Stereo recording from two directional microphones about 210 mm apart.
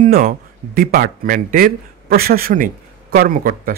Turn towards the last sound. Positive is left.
turn(degrees=-40)  # may be behind; listen again after turning